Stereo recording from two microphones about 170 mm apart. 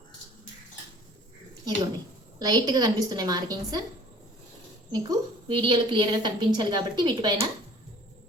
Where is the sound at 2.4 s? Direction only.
25° right (ahead or behind).